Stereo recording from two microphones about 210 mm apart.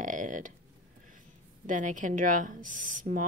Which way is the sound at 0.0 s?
40° right (ahead or behind).